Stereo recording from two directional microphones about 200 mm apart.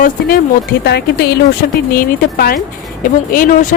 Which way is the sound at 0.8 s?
55° left (ahead or behind).